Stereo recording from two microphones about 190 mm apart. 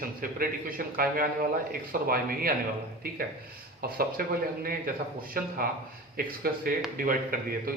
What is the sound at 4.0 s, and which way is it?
Speech, 50° right (ahead or behind).